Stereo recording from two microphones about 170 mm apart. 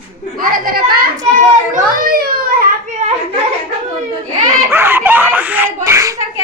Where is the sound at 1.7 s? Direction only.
60° right (ahead or behind).